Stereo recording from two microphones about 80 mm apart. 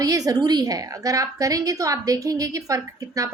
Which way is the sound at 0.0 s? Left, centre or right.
Right.